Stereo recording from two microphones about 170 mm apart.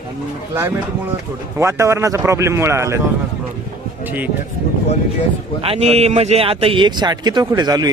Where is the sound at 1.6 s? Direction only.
15° right (ahead or behind).